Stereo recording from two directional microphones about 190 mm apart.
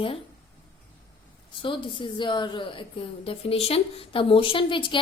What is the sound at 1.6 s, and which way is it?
A woman's voice, 25° left (ahead or behind).